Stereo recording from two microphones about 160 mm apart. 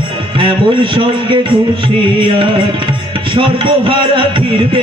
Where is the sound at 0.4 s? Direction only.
30° right (ahead or behind).